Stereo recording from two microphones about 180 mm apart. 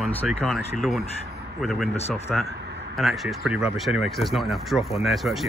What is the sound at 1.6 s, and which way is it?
Speech, centre (ahead or behind).